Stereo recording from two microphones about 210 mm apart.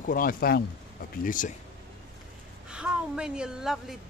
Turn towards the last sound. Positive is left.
turn(degrees=-5)  # may be behind; listen again after turning